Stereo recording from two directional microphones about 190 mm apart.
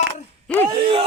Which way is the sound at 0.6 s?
25° right (ahead or behind).